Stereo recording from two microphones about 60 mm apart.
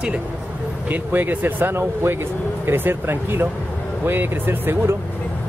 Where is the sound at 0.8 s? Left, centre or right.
Right.